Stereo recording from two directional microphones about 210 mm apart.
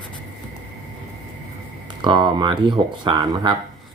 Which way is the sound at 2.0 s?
20° right (ahead or behind).